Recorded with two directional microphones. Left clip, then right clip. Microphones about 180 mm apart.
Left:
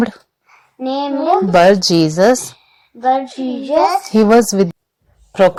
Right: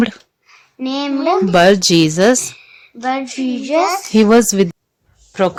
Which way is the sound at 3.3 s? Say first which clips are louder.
Left 1 dB; 50° right (ahead or behind).